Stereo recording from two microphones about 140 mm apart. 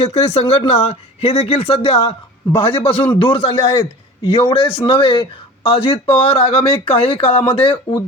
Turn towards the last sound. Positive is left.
turn(degrees=40)  # may be behind; listen again after turning